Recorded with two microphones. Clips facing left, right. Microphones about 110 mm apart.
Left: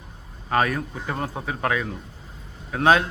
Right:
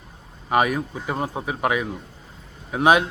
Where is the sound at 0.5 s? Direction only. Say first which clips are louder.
Right 2 dB; 15° right (ahead or behind).